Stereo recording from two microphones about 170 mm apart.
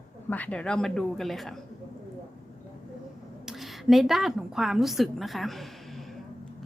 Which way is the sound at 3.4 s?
Centre (ahead or behind).